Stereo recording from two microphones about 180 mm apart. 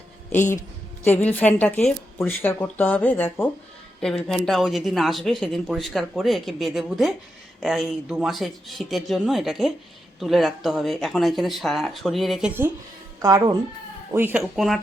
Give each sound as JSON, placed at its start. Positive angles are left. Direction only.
{"t": 1.0, "sound": "speech", "side_deg": 10}
{"t": 4.0, "sound": "speech", "side_deg": 0}
{"t": 13.2, "sound": "speech", "side_deg": -20}